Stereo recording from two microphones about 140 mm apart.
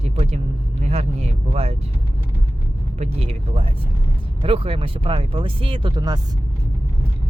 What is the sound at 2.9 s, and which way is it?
Speech, 50° right (ahead or behind).